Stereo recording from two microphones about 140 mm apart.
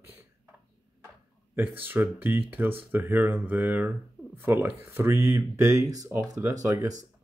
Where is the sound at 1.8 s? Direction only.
15° right (ahead or behind).